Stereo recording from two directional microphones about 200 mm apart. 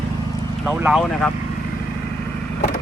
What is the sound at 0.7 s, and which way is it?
Speech, 5° right (ahead or behind).